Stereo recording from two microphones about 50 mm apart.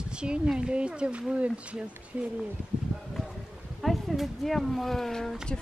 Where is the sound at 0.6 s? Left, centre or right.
Centre.